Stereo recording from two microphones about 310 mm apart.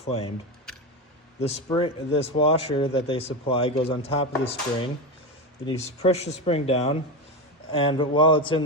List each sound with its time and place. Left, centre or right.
0.0 s speech: centre
1.4 s a man's voice: centre